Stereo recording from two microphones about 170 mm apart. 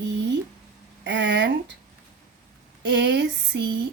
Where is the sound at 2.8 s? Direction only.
90° right.